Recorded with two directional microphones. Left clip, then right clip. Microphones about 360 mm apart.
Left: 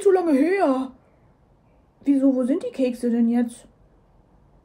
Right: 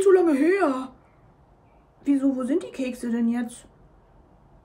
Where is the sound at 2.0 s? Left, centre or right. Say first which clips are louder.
Left 4 dB; centre.